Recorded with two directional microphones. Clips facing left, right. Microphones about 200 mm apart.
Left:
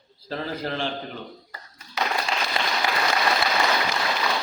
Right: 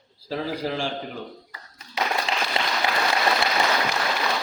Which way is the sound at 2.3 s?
20° right (ahead or behind).